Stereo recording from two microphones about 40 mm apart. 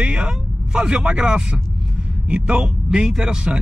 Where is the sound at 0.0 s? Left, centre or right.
Right.